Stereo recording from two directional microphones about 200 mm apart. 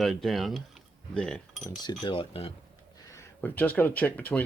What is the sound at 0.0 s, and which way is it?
Speech, centre (ahead or behind).